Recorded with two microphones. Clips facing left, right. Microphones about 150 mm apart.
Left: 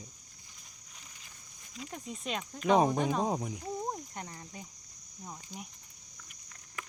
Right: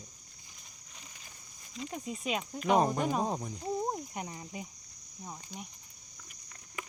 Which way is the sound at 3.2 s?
10° left (ahead or behind).